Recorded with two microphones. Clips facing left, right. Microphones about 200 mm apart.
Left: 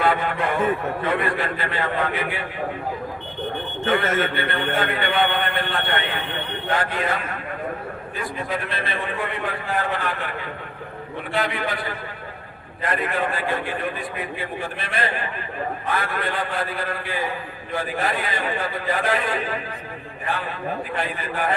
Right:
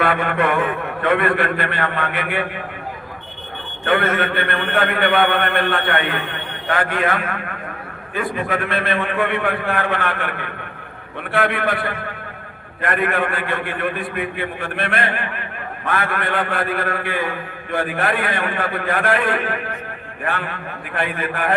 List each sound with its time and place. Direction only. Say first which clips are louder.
0.0 s a man's voice: right 3 dB; 60° right (ahead or behind)
3.8 s a man's voice: right 3 dB; 55° right (ahead or behind)